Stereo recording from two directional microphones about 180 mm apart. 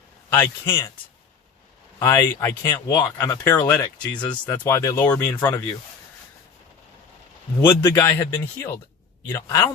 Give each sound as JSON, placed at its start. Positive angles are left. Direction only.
{"t": 0.3, "sound": "speech", "side_deg": 10}
{"t": 2.0, "sound": "speech", "side_deg": 15}
{"t": 4.6, "sound": "speech", "side_deg": 15}
{"t": 5.4, "sound": "speech", "side_deg": 20}
{"t": 7.7, "sound": "speech", "side_deg": 15}